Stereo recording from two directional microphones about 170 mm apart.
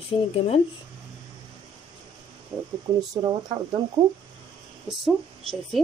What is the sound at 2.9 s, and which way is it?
Speech, 25° right (ahead or behind).